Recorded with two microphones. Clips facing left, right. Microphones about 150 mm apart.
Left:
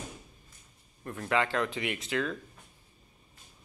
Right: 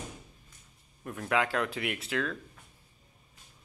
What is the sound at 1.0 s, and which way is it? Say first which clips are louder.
Speech: even; 5° right (ahead or behind).